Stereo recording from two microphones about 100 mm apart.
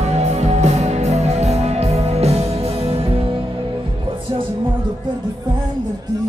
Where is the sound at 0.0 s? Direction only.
90° right; by 3.3 s 70° right (ahead or behind).